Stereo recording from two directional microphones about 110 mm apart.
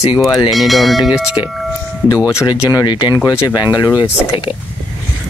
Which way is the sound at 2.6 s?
35° left (ahead or behind).